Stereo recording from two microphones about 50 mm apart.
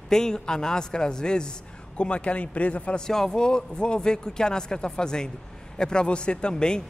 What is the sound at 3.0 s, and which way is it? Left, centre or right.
Speech, centre.